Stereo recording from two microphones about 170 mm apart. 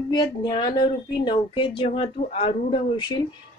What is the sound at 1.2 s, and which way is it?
A woman's voice, 30° left (ahead or behind).